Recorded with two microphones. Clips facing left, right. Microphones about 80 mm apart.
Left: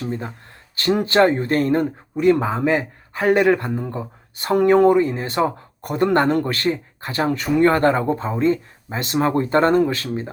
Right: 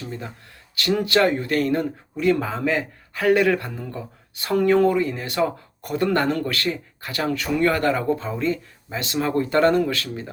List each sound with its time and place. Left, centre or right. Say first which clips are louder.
0.0 s speech: left 6 dB; left